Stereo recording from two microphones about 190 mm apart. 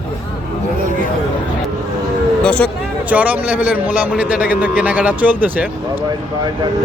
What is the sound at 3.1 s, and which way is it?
A man's voice, 5° right (ahead or behind).